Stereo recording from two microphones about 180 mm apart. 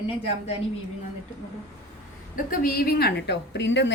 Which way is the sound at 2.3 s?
50° left (ahead or behind).